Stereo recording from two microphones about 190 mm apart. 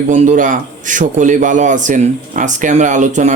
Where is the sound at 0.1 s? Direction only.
40° right (ahead or behind).